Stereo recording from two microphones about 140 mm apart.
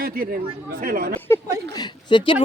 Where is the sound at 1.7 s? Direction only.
30° left (ahead or behind).